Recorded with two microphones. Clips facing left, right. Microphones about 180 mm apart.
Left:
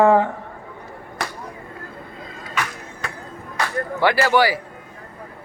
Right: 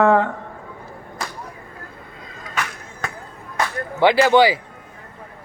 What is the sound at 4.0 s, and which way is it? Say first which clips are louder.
Speech: right 4 dB; 20° right (ahead or behind).